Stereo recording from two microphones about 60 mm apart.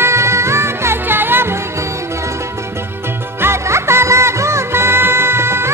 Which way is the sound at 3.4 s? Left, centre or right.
Right.